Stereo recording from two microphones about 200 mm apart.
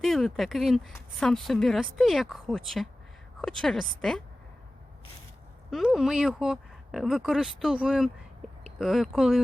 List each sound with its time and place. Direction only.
0.0 s speech: centre (ahead or behind)
5.7 s speech: centre (ahead or behind)